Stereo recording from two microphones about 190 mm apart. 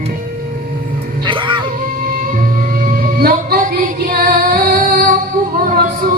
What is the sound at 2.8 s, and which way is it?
Child singing, 50° right (ahead or behind).